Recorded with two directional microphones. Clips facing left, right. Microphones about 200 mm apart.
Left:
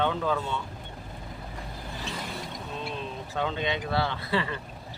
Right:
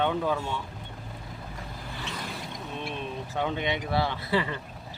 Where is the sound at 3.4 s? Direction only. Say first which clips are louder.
Even; 15° right (ahead or behind).